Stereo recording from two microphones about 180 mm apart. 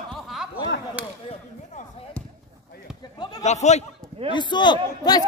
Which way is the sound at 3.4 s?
40° left (ahead or behind).